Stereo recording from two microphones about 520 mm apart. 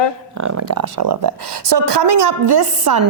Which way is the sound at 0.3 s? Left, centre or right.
Right.